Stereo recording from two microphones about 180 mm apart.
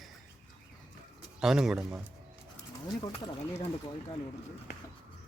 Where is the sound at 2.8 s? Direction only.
25° left (ahead or behind).